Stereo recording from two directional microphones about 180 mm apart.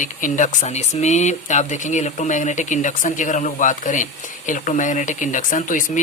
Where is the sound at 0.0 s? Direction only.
45° left (ahead or behind).